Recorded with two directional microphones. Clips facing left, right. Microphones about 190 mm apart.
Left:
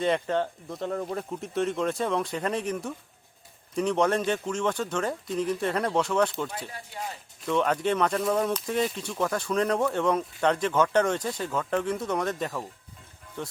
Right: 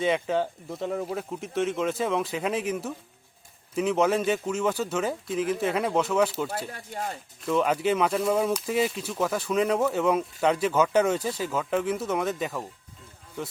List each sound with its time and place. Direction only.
0.0 s speech: 5° right (ahead or behind)
6.7 s speech: 45° right (ahead or behind)
7.4 s speech: 5° right (ahead or behind)